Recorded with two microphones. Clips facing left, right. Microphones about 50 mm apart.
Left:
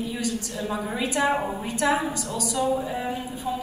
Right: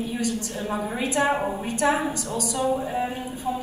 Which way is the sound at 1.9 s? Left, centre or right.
Right.